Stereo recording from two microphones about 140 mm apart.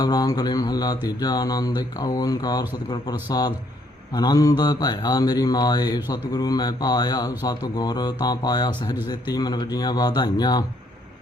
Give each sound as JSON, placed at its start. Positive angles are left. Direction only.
{"t": 0.0, "sound": "speech", "side_deg": 25}